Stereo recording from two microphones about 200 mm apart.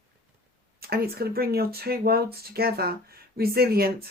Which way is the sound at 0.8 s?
50° right (ahead or behind).